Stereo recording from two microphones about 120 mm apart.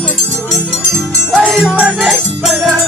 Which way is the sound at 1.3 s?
Centre (ahead or behind).